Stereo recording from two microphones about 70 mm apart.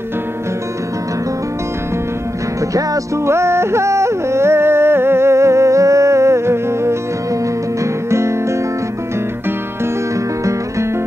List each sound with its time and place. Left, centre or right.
3.3 s music: right